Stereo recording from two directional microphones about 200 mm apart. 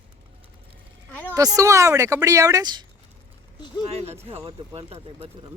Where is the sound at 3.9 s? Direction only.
30° right (ahead or behind).